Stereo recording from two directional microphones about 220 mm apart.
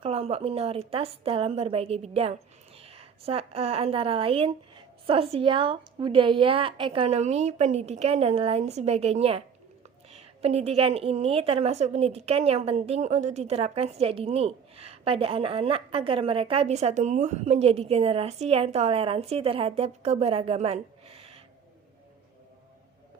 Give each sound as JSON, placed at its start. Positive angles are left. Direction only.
{"t": 0.0, "sound": "a woman's voice", "side_deg": -25}